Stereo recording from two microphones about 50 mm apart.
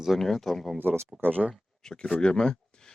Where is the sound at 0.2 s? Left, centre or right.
Centre.